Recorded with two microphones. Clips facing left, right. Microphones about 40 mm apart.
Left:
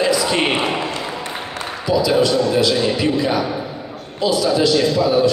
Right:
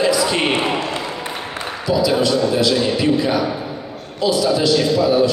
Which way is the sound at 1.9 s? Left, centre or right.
Centre.